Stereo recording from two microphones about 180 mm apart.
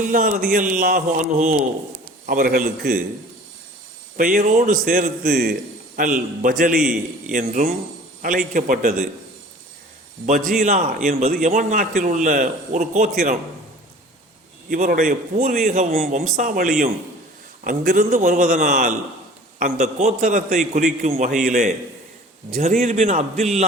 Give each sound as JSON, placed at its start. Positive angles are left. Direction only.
{"t": 0.0, "sound": "a man's voice", "side_deg": -50}
{"t": 4.2, "sound": "a man's voice", "side_deg": -50}
{"t": 10.2, "sound": "a man's voice", "side_deg": -45}
{"t": 14.7, "sound": "a man's voice", "side_deg": -45}
{"t": 16.2, "sound": "a man's voice", "side_deg": -50}
{"t": 18.1, "sound": "a man's voice", "side_deg": -40}